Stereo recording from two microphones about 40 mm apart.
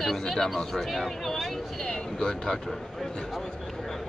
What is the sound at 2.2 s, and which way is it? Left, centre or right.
Speech, centre.